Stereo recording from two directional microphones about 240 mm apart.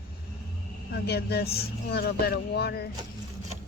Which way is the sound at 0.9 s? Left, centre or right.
Left.